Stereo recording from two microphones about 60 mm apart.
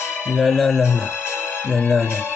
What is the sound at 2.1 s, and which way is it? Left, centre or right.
Speech, left.